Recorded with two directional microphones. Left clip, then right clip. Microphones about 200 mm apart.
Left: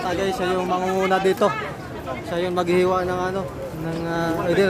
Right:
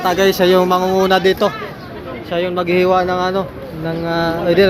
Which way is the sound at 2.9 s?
15° right (ahead or behind).